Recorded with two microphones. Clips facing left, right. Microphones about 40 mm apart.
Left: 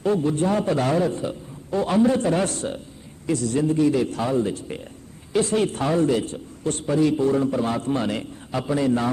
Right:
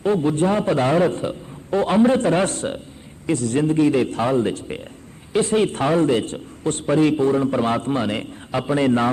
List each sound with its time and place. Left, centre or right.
0.0 s a man's voice: right
5.3 s a man's voice: right
7.5 s a man's voice: right
7.9 s a man's voice: right
8.2 s a man's voice: right